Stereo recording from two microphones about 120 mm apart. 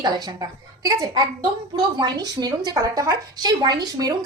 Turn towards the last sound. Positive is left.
turn(degrees=-35)  # may be behind; listen again after turning